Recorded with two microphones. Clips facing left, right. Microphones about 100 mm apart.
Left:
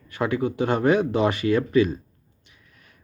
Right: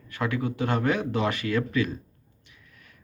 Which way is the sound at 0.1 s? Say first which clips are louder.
Left 4 dB; 20° left (ahead or behind).